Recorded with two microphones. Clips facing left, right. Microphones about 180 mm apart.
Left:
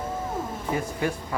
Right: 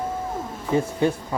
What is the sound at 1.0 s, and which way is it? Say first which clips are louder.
Speech: right 5 dB; 25° right (ahead or behind).